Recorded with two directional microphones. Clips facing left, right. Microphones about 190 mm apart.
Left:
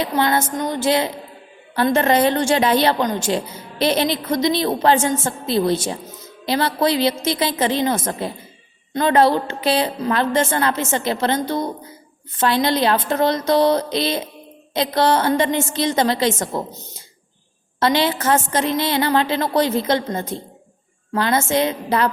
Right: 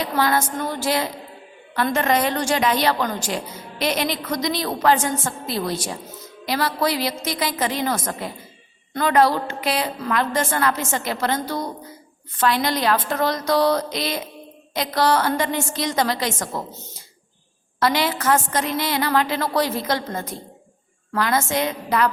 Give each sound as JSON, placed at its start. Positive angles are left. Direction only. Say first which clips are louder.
{"t": 0.0, "sound": "a woman's voice", "louder": "left 2 dB", "side_deg": 25}
{"t": 17.7, "sound": "a woman's voice", "louder": "left 3 dB", "side_deg": 25}